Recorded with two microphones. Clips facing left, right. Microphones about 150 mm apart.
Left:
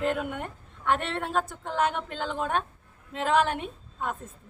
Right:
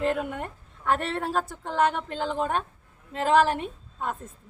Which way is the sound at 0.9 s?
Centre (ahead or behind).